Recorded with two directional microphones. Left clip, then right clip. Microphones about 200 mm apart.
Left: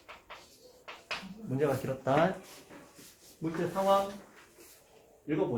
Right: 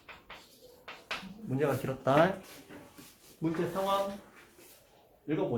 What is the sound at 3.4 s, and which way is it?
Speech, 30° right (ahead or behind).